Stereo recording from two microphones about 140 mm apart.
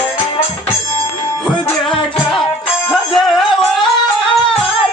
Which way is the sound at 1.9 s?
Centre (ahead or behind).